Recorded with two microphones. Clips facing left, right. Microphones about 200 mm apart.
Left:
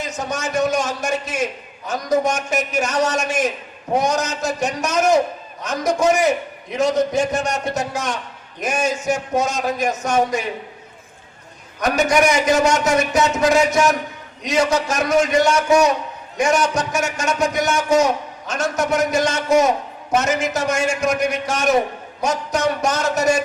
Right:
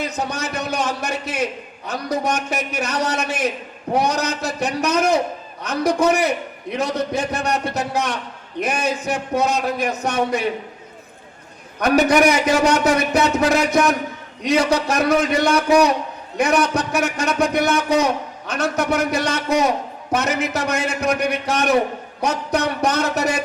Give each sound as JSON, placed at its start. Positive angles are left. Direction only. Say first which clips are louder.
{"t": 0.0, "sound": "a sound", "louder": "even", "side_deg": -60}
{"t": 2.2, "sound": "a man's voice", "louder": "left 1 dB", "side_deg": -60}
{"t": 11.8, "sound": "a man's voice", "louder": "right 2 dB", "side_deg": -60}